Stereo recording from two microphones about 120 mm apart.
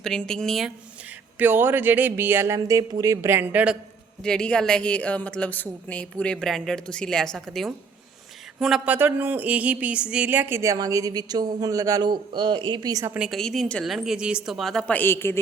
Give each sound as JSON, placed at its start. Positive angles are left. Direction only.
{"t": 0.0, "sound": "a woman's voice", "side_deg": 5}
{"t": 1.4, "sound": "speech", "side_deg": -15}
{"t": 4.2, "sound": "a woman's voice", "side_deg": 5}
{"t": 8.9, "sound": "speech", "side_deg": -15}
{"t": 13.1, "sound": "a woman's voice", "side_deg": -5}